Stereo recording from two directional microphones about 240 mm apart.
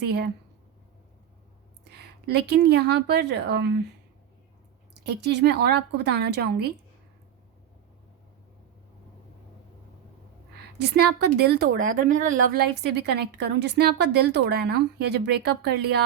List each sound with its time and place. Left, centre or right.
1.9 s a woman's voice: right
5.0 s a woman's voice: right
10.8 s a woman's voice: right